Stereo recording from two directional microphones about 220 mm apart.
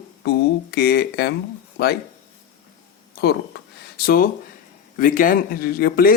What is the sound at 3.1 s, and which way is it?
Speech, 45° left (ahead or behind).